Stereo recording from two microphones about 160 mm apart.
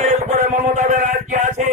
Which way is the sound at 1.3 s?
50° right (ahead or behind).